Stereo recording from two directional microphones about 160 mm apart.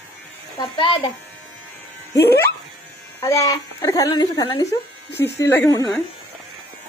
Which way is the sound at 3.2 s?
20° left (ahead or behind).